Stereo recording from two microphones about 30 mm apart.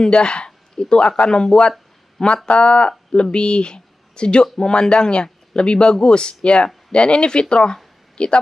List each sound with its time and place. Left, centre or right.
0.0 s speech: left
2.2 s speech: left